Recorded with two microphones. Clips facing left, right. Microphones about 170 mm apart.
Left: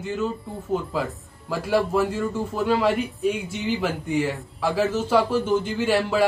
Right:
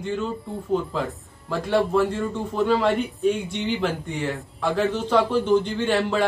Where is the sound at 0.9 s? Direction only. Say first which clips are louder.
Even; 5° left (ahead or behind).